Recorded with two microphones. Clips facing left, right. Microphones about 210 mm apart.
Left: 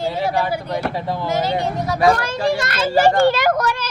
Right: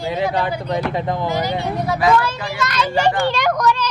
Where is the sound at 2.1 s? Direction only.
45° left (ahead or behind).